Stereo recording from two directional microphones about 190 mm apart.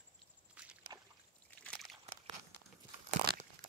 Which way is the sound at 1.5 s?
5° left (ahead or behind).